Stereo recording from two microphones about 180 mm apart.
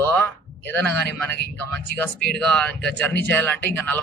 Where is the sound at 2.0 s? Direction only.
5° left (ahead or behind).